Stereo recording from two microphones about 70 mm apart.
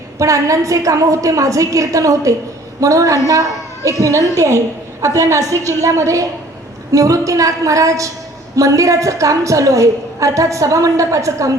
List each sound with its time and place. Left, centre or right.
0.2 s a woman's voice: right